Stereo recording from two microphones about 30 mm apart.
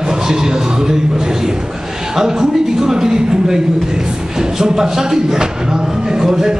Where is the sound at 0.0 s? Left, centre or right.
Right.